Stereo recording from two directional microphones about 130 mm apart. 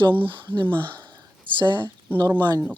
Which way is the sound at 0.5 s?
40° right (ahead or behind).